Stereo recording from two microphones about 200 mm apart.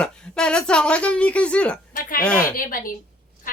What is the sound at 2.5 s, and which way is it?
Speech, 45° left (ahead or behind).